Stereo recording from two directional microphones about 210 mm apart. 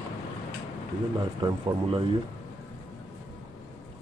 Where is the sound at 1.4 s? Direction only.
25° right (ahead or behind).